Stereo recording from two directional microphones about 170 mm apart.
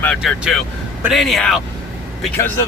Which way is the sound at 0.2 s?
Centre (ahead or behind).